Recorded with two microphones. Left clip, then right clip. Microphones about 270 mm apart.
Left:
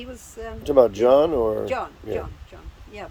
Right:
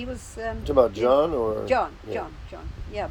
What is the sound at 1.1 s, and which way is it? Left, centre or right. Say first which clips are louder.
Speech: left 4 dB; left.